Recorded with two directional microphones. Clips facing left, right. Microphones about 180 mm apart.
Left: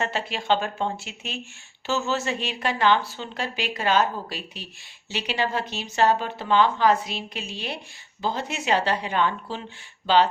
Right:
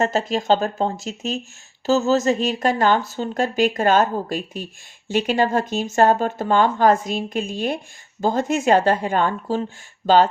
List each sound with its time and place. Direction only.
0.0 s a woman's voice: 40° right (ahead or behind)